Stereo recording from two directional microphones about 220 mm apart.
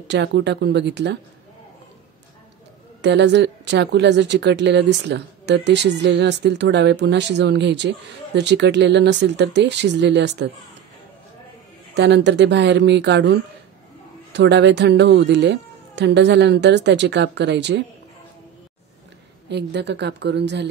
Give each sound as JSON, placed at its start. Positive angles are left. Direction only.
{"t": 0.1, "sound": "a woman's voice", "side_deg": -50}
{"t": 3.0, "sound": "a woman's voice", "side_deg": -50}
{"t": 11.9, "sound": "a woman's voice", "side_deg": -50}
{"t": 19.5, "sound": "a woman's voice", "side_deg": -50}